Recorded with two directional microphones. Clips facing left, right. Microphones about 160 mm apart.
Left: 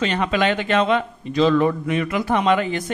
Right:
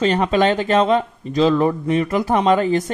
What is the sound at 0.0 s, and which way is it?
A man's voice, 35° right (ahead or behind).